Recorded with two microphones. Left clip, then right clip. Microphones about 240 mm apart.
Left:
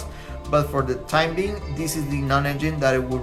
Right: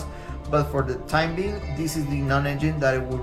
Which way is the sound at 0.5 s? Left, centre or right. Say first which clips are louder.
Left 2 dB; centre.